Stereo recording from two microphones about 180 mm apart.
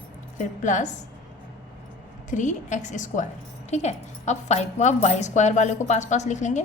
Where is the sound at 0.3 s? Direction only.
45° left (ahead or behind).